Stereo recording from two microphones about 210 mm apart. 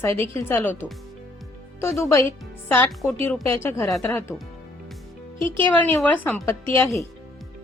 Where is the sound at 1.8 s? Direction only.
15° left (ahead or behind).